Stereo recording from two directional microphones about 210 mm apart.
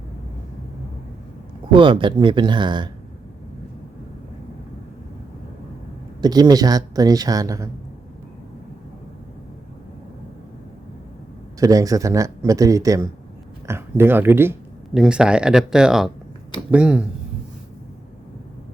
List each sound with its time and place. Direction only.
1.7 s speech: 25° right (ahead or behind)
6.2 s speech: 20° right (ahead or behind)
11.6 s speech: 15° right (ahead or behind)